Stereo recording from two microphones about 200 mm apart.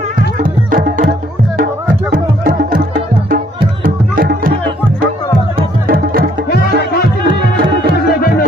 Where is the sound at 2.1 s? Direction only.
45° right (ahead or behind).